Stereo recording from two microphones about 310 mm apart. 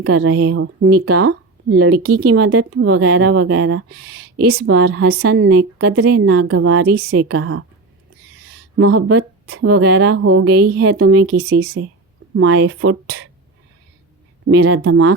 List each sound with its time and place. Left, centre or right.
0.0 s speech: right
1.7 s speech: right
9.0 s speech: right
9.6 s speech: right
14.4 s speech: right